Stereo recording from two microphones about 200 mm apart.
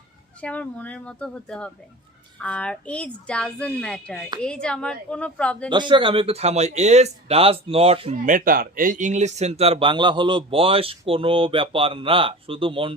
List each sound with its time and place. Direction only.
0.4 s speech: 5° left (ahead or behind)
5.7 s speech: 25° right (ahead or behind)
8.2 s speech: 45° right (ahead or behind); by 12.9 s 25° right (ahead or behind)